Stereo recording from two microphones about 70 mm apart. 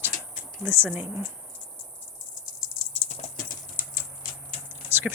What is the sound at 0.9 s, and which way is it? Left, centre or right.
Speech, right.